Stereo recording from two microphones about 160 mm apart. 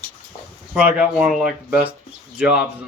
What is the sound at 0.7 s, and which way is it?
Speech, 10° right (ahead or behind).